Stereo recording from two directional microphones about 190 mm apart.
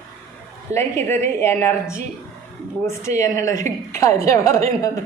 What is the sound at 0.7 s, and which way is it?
A woman's voice, 15° left (ahead or behind).